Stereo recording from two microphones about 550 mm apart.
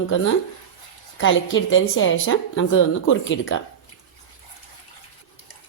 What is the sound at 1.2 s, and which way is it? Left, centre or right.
A woman's voice, left.